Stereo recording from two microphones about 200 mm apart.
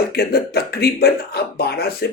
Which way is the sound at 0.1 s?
50° left (ahead or behind).